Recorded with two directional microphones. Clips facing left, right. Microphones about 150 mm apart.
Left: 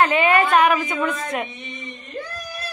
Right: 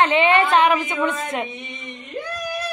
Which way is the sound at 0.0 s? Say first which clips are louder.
Right 1 dB; 25° right (ahead or behind).